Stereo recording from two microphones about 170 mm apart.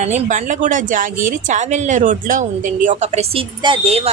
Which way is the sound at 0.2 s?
45° right (ahead or behind).